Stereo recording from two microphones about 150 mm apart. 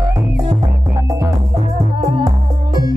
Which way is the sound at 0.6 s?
25° right (ahead or behind).